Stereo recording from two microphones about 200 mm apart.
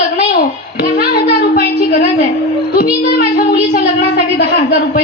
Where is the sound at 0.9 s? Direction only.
50° left (ahead or behind).